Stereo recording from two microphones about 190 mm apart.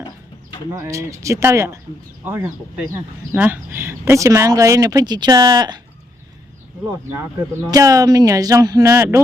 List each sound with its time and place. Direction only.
0.7 s speech: 15° right (ahead or behind)
7.7 s speech: 20° right (ahead or behind)